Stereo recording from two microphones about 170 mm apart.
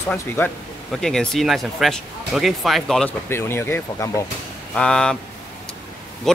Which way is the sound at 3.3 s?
15° left (ahead or behind).